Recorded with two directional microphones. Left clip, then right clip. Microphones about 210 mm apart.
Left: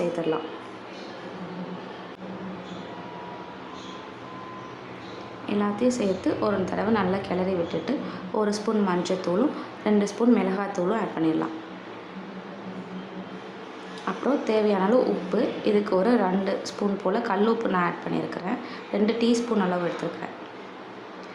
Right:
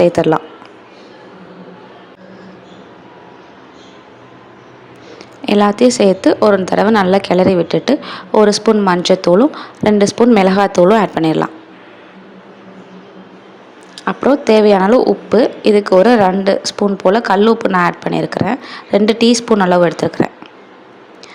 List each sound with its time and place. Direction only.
0.2 s a man's voice: 45° right (ahead or behind)
5.5 s a woman's voice: 45° right (ahead or behind)
14.0 s a woman's voice: 40° right (ahead or behind)